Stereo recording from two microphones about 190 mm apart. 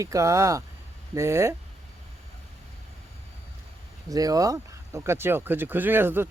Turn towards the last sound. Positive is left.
turn(degrees=-10)  # may be behind; listen again after turning